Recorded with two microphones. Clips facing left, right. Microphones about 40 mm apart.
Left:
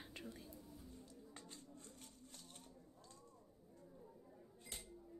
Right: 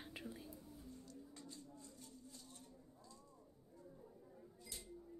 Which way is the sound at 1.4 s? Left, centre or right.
Left.